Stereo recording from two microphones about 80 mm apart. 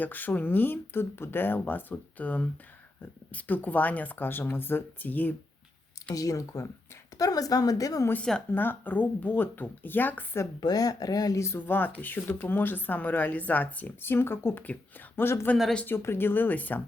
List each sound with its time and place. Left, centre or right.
0.0 s speech: left
6.1 s speech: left
8.5 s speech: left
10.6 s speech: left
11.4 s speech: left